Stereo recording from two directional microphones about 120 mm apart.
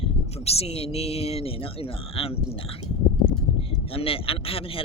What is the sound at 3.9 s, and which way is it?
Speech, 50° left (ahead or behind).